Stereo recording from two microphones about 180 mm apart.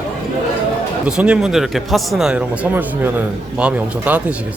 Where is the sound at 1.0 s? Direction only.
5° right (ahead or behind).